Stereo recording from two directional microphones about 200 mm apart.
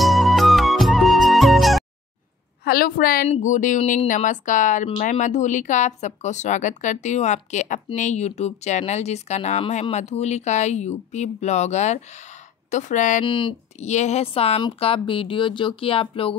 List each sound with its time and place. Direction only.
0.0 s music: centre (ahead or behind)
2.6 s a woman's voice: 50° left (ahead or behind)
13.2 s speech: 25° left (ahead or behind)